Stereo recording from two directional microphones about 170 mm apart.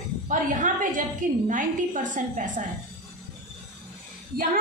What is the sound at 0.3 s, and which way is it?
A woman's voice, 50° right (ahead or behind).